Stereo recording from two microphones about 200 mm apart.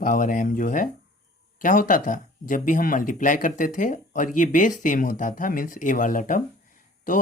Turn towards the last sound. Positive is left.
turn(degrees=40)  # may be behind; listen again after turning